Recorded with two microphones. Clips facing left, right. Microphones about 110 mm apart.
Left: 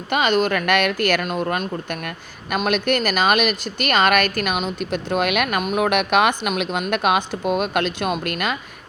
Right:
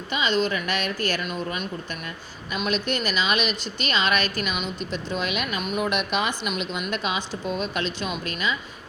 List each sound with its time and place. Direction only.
0.1 s a woman's voice: 55° left (ahead or behind)